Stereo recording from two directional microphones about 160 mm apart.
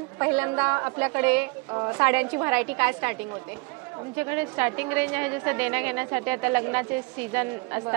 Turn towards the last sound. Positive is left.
turn(degrees=-15)  # may be behind; listen again after turning